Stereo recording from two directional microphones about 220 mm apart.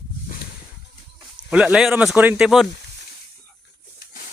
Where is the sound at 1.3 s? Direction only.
5° right (ahead or behind).